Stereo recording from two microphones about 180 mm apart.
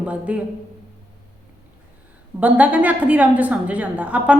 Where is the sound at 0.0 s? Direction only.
5° right (ahead or behind).